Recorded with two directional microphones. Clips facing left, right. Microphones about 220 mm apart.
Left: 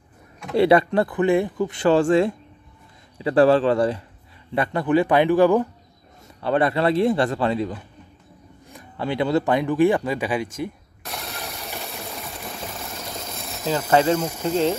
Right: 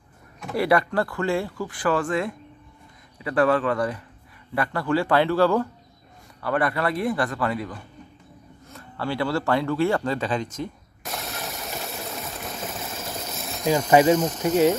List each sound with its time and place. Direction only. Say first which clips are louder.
0.6 s speech: left 5 dB; 25° left (ahead or behind)
11.1 s a sound: right 1 dB; centre (ahead or behind)
13.7 s speech: right 2 dB; 10° right (ahead or behind)